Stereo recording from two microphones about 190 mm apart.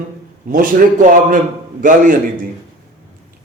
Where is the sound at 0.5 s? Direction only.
45° right (ahead or behind).